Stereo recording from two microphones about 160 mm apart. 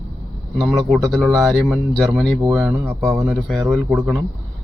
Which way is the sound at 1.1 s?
Centre (ahead or behind).